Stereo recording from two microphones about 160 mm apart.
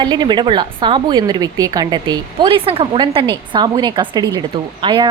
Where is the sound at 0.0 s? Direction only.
25° right (ahead or behind).